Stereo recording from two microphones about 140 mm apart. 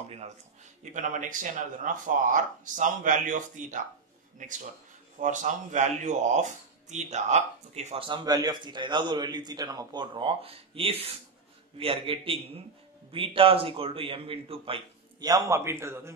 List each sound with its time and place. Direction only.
0.9 s speech: 65° right (ahead or behind); by 16.1 s 20° right (ahead or behind)